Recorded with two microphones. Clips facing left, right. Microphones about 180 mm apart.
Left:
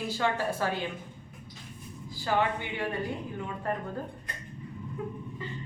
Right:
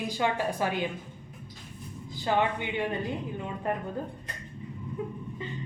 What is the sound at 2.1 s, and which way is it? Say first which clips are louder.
A woman's voice: right 1 dB; 20° right (ahead or behind).